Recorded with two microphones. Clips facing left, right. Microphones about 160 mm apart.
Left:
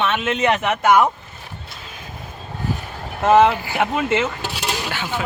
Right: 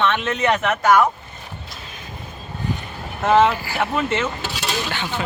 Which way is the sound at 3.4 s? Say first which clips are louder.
Left 2 dB; 20° left (ahead or behind).